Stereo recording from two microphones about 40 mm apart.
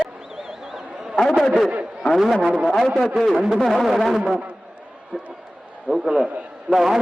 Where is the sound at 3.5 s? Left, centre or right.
Centre.